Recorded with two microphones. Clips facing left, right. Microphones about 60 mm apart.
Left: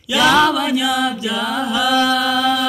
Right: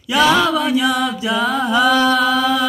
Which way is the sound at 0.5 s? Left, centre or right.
Right.